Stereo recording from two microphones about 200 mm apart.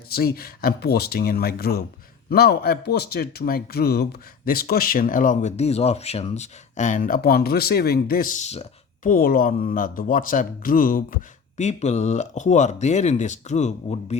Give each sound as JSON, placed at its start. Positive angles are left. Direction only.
{"t": 0.1, "sound": "speech", "side_deg": 50}
{"t": 9.0, "sound": "speech", "side_deg": 45}